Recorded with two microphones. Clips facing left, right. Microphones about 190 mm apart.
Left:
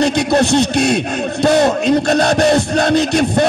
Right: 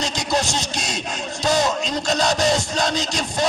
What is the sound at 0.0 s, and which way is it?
Speech, 60° left (ahead or behind).